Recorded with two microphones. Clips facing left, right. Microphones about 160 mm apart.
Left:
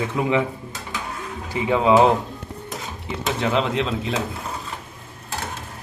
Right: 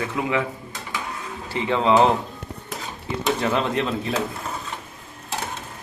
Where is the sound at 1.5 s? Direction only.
10° left (ahead or behind).